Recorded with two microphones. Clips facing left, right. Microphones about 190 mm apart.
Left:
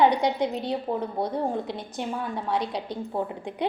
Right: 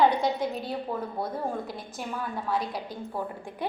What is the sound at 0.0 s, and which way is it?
A woman's voice, 20° left (ahead or behind).